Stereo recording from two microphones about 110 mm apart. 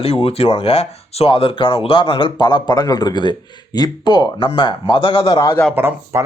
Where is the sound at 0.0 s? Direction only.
60° left (ahead or behind).